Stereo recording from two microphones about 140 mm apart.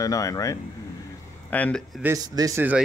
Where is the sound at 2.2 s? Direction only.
25° right (ahead or behind).